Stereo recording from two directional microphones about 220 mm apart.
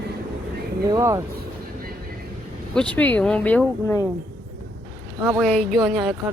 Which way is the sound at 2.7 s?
5° left (ahead or behind).